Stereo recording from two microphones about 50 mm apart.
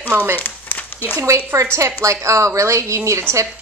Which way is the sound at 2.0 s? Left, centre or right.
Right.